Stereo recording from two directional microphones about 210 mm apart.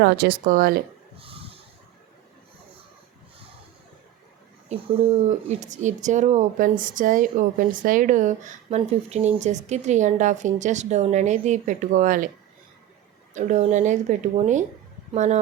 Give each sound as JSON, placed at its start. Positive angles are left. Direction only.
{"t": 0.0, "sound": "speech", "side_deg": -50}
{"t": 1.2, "sound": "a sound", "side_deg": -25}
{"t": 4.7, "sound": "speech", "side_deg": -30}
{"t": 13.3, "sound": "speech", "side_deg": -35}